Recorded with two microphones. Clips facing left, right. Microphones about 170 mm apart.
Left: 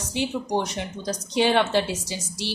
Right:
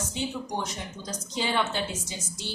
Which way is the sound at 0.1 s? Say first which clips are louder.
Left 11 dB; 75° left (ahead or behind).